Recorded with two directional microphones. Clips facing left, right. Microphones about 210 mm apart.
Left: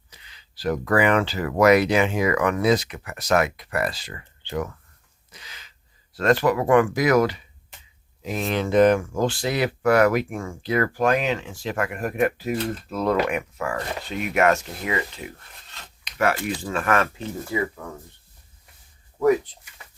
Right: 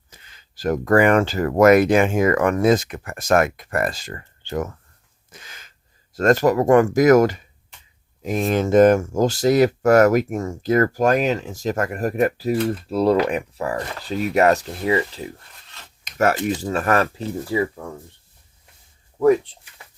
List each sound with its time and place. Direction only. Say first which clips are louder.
0.1 s speech: right 2 dB; 45° right (ahead or behind)
5.3 s a sound: right 2 dB; 50° right (ahead or behind)
6.1 s speech: right 3 dB; 45° right (ahead or behind)
16.0 s a sound: right 3 dB; 45° right (ahead or behind)
16.3 s speech: right 5 dB; 20° right (ahead or behind)
16.7 s speech: right 1 dB; 40° right (ahead or behind)